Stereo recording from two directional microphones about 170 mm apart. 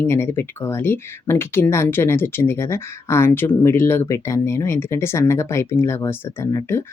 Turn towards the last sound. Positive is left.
turn(degrees=15)  # may be behind; listen again after turning